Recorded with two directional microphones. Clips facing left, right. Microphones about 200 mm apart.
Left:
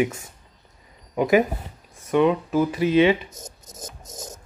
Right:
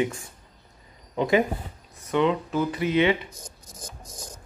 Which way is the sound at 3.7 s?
25° left (ahead or behind).